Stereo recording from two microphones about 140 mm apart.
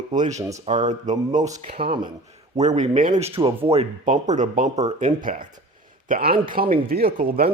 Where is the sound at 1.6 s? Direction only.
45° right (ahead or behind).